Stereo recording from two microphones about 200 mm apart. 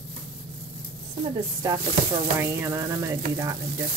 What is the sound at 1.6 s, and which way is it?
Speech, 15° right (ahead or behind).